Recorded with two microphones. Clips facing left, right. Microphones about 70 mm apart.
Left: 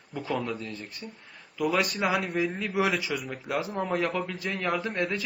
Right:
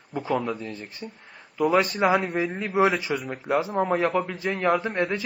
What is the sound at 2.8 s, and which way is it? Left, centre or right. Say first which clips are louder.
Speech: right 4 dB; right.